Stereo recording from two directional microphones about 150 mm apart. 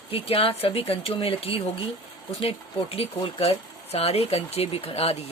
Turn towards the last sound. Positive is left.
turn(degrees=40)  # may be behind; listen again after turning